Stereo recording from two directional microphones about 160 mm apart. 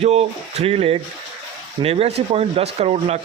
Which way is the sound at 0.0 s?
40° right (ahead or behind).